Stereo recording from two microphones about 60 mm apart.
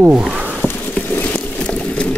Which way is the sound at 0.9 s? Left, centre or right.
Left.